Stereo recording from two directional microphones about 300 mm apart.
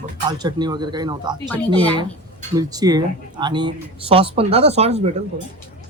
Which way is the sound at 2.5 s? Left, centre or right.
Centre.